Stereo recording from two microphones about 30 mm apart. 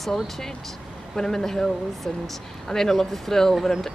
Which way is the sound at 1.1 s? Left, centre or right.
Centre.